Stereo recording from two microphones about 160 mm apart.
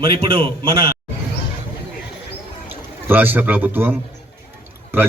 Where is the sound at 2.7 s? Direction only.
10° right (ahead or behind).